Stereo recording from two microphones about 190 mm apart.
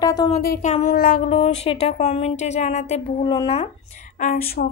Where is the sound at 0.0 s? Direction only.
20° left (ahead or behind).